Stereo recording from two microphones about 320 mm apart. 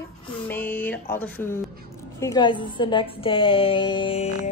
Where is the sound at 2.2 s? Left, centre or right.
Centre.